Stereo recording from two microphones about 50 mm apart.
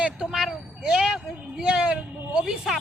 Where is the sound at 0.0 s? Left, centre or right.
Centre.